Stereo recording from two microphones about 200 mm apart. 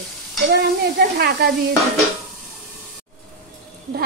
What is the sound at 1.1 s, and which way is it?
Speech, 50° right (ahead or behind).